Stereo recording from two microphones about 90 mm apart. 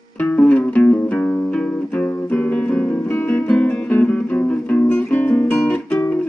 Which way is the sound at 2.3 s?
15° left (ahead or behind).